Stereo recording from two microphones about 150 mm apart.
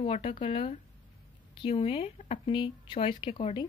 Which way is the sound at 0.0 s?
40° left (ahead or behind).